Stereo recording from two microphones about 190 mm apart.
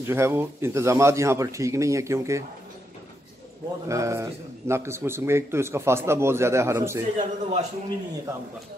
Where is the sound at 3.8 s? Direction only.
15° right (ahead or behind).